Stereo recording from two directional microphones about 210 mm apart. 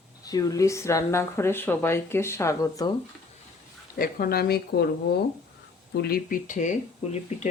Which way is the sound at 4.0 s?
45° left (ahead or behind).